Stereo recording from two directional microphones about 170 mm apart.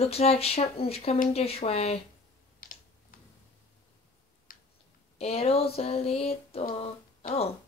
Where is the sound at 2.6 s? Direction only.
55° left (ahead or behind).